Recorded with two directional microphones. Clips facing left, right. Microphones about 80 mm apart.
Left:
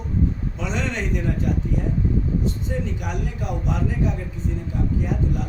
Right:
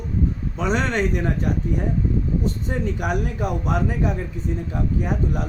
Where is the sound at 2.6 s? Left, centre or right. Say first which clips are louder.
Right 3 dB; right.